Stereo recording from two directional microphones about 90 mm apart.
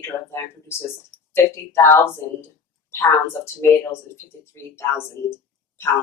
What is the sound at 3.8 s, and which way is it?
A woman's voice, 30° left (ahead or behind).